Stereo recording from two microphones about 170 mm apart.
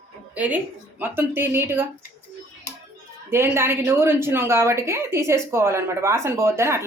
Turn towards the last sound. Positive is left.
turn(degrees=-15)  # may be behind; listen again after turning